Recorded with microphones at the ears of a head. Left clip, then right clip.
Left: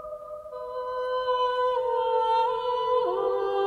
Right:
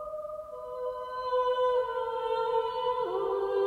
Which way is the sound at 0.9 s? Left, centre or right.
Left.